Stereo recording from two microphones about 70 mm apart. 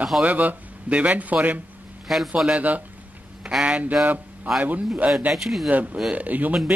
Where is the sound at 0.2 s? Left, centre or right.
Right.